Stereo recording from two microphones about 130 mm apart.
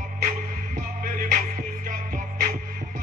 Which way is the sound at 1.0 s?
90° right.